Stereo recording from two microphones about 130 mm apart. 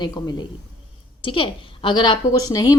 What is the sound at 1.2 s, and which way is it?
A woman's voice, 40° left (ahead or behind).